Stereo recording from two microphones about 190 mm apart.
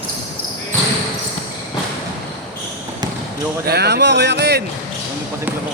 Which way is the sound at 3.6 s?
55° right (ahead or behind).